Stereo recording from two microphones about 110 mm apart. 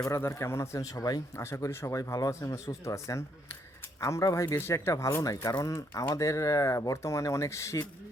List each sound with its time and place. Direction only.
0.0 s speech: 25° left (ahead or behind)
1.5 s speech: 25° left (ahead or behind)